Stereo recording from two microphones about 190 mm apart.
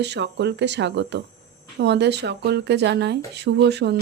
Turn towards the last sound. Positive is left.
turn(degrees=-60)  # may be behind; listen again after turning